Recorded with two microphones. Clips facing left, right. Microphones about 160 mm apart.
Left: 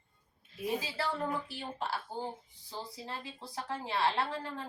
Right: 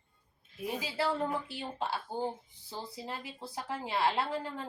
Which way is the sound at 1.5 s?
20° right (ahead or behind).